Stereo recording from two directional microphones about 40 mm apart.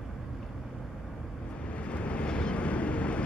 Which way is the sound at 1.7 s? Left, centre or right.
Left.